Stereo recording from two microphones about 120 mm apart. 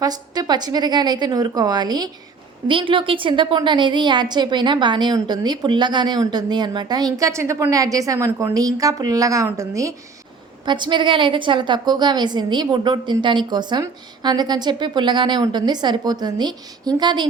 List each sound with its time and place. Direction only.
0.0 s a woman's voice: 35° right (ahead or behind)
10.7 s a woman's voice: 40° right (ahead or behind)